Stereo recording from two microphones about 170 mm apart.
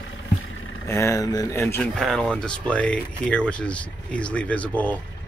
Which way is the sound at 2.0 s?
5° left (ahead or behind).